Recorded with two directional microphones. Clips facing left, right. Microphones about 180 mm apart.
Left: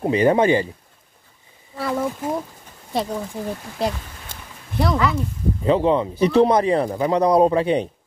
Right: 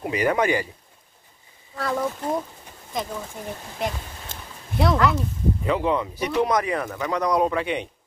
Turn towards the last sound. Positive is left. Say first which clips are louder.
# left 6 dB
turn(degrees=35)  # may be behind; listen again after turning